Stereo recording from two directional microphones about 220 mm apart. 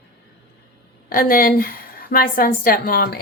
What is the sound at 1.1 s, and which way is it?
A woman's voice, 40° left (ahead or behind).